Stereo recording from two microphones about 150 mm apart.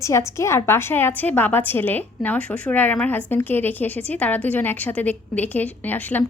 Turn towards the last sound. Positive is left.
turn(degrees=10)  # may be behind; listen again after turning